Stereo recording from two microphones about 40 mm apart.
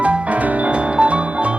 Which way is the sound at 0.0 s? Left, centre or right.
Right.